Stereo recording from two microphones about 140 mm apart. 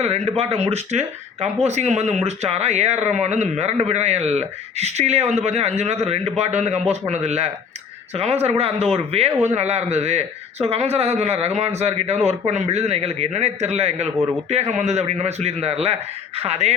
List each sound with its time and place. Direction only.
0.0 s speech: 50° right (ahead or behind)